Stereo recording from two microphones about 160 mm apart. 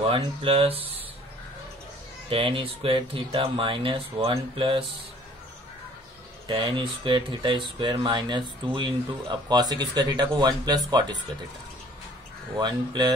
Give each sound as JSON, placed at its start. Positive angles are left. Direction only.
{"t": 0.1, "sound": "speech", "side_deg": -35}
{"t": 2.2, "sound": "speech", "side_deg": -35}
{"t": 6.4, "sound": "speech", "side_deg": -30}
{"t": 12.5, "sound": "speech", "side_deg": -25}